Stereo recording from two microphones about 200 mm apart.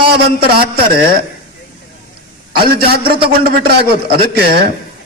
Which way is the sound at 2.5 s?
50° right (ahead or behind).